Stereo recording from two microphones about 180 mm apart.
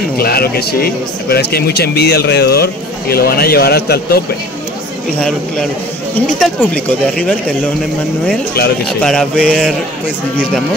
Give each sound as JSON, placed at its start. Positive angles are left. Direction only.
{"t": 0.2, "sound": "speech", "side_deg": 60}
{"t": 6.1, "sound": "speech", "side_deg": 5}
{"t": 9.0, "sound": "mantra", "side_deg": 5}